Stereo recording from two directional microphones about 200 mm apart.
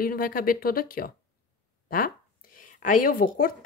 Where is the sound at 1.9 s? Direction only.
45° left (ahead or behind).